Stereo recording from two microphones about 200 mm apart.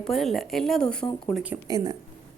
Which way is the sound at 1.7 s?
20° right (ahead or behind).